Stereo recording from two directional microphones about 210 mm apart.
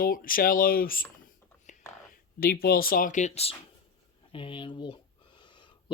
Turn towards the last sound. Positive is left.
turn(degrees=20)  # may be behind; listen again after turning